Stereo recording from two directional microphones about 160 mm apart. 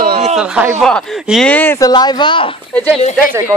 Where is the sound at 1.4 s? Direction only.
10° left (ahead or behind); by 2.6 s 30° left (ahead or behind).